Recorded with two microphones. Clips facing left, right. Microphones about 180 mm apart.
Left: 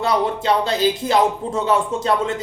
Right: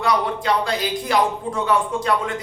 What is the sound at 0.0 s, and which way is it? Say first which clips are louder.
Speech: left 2 dB; 25° left (ahead or behind).